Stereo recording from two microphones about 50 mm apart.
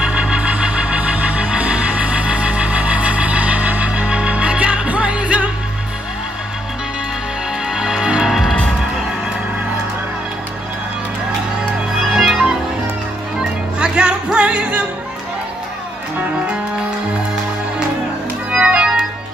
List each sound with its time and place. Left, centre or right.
0.0 s music: right
7.7 s music: centre
8.3 s music: centre
12.0 s music: centre; by 14.8 s right
18.6 s organ: right